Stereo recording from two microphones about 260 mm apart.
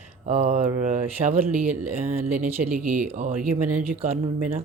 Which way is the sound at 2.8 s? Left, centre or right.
Centre.